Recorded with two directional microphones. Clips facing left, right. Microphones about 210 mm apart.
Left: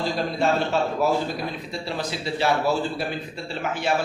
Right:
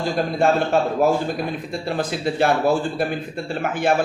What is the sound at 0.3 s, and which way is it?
A man's voice, 50° right (ahead or behind).